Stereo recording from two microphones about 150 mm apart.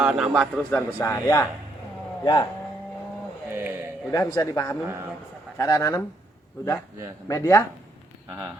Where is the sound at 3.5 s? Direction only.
15° right (ahead or behind).